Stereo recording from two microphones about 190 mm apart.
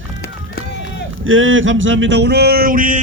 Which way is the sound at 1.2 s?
90° right.